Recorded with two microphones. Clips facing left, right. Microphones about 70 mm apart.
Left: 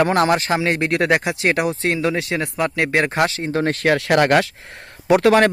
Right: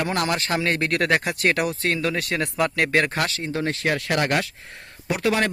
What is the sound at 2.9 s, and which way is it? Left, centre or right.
Speech, left.